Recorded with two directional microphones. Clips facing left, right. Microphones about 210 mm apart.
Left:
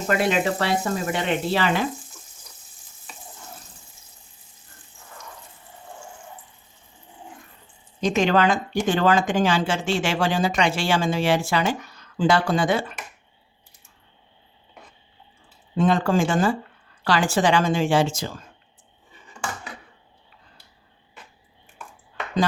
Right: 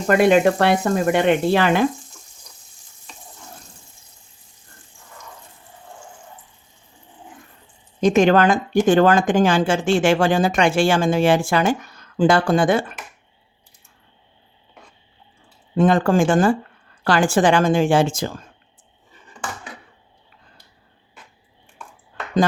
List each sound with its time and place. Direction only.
0.2 s speech: 55° right (ahead or behind)
2.5 s frying: 5° left (ahead or behind)
3.1 s water tap: 5° left (ahead or behind)
8.0 s speech: 50° right (ahead or behind)
15.7 s speech: 50° right (ahead or behind)